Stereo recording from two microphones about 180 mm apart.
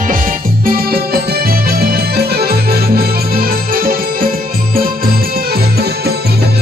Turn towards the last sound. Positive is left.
turn(degrees=-60)  # may be behind; listen again after turning